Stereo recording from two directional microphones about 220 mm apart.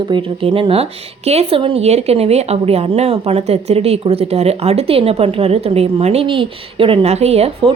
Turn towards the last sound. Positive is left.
turn(degrees=-30)  # may be behind; listen again after turning